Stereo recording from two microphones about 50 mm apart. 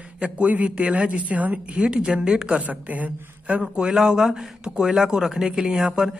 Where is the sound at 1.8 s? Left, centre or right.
Centre.